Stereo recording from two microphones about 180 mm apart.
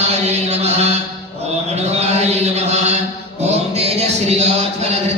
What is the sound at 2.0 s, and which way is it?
Mantra, 40° right (ahead or behind).